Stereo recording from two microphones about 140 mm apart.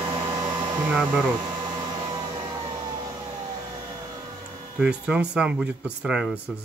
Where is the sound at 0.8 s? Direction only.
10° right (ahead or behind).